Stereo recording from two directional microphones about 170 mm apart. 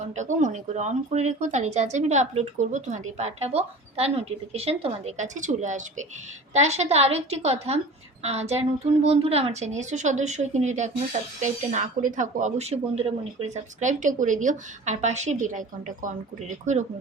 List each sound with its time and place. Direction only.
0.0 s a woman's voice: 45° right (ahead or behind)